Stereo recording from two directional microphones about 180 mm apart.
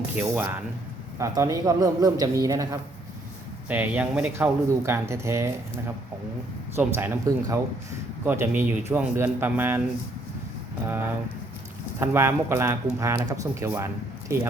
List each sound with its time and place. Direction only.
0.2 s speech: 10° right (ahead or behind)
3.7 s speech: 10° right (ahead or behind)
6.7 s speech: 15° right (ahead or behind)
10.8 s speech: 10° right (ahead or behind)